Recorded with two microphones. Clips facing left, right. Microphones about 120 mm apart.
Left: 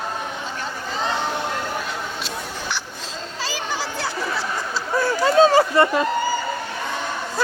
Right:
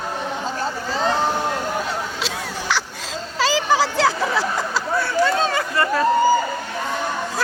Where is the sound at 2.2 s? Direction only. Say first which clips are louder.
Right 3 dB; 90° right.